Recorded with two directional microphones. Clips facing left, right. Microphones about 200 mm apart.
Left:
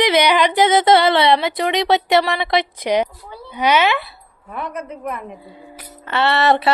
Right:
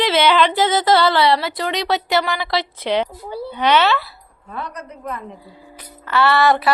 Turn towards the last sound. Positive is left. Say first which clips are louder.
# even
turn(degrees=25)  # may be behind; listen again after turning